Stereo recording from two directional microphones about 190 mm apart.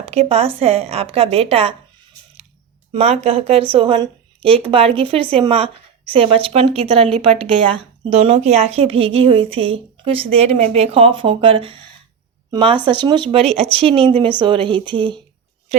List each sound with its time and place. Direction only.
0.0 s a woman's voice: 35° right (ahead or behind)
2.9 s a woman's voice: 30° right (ahead or behind)